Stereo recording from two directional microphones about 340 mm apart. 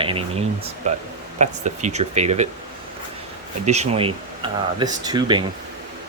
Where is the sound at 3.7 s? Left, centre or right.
Centre.